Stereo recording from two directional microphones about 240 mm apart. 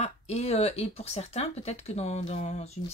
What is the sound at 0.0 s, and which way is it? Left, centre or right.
Speech, left.